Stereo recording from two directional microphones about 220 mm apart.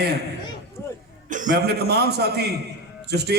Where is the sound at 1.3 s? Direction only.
35° right (ahead or behind).